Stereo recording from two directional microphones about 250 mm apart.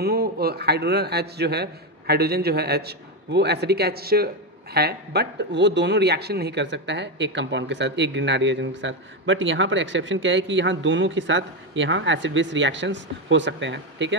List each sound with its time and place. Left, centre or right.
0.0 s a man's voice: right